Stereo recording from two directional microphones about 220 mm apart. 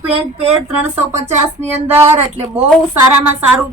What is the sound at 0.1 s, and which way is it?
Speech, 25° right (ahead or behind).